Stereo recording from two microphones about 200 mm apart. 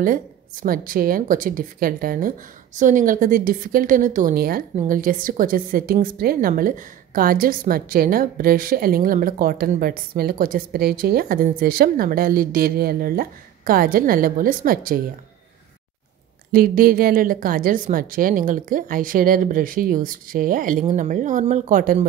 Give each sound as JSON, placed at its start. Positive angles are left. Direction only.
{"t": 0.0, "sound": "a woman's voice", "side_deg": -45}
{"t": 16.5, "sound": "a woman's voice", "side_deg": -45}